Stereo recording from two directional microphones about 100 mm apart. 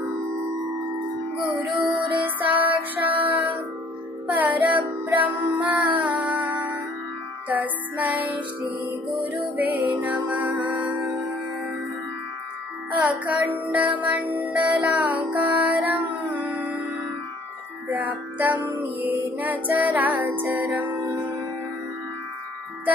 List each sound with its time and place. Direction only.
1.4 s music: 15° right (ahead or behind)
9.2 s music: 55° right (ahead or behind)
9.9 s music: 15° right (ahead or behind)
12.9 s music: 15° right (ahead or behind)